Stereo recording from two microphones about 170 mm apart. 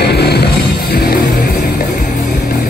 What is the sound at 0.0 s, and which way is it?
Music, 75° left (ahead or behind).